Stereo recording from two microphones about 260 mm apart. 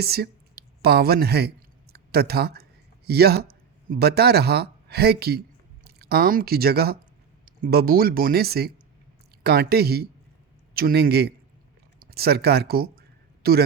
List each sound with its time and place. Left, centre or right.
0.0 s speech: right